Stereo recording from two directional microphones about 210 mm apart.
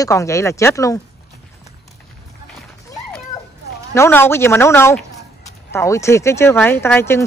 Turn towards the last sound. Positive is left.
turn(degrees=10)  # may be behind; listen again after turning